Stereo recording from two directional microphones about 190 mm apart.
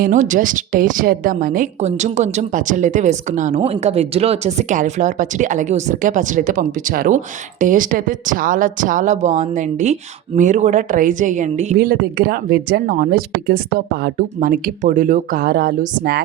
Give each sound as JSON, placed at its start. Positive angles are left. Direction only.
{"t": 0.0, "sound": "speech", "side_deg": -40}
{"t": 11.9, "sound": "speech", "side_deg": -55}